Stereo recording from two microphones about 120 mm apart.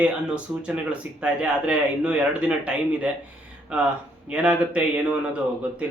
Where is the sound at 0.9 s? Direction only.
10° right (ahead or behind).